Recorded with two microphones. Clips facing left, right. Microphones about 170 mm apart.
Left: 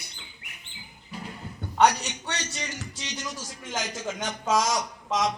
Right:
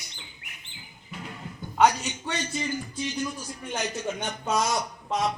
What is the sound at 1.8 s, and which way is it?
A man's voice, 70° left (ahead or behind).